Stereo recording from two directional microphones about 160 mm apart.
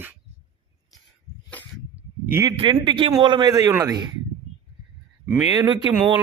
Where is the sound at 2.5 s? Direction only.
30° right (ahead or behind).